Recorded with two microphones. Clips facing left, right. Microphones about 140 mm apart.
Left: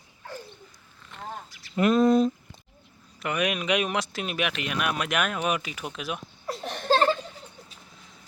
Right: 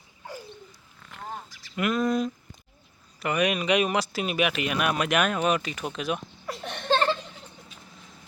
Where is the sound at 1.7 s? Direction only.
30° left (ahead or behind).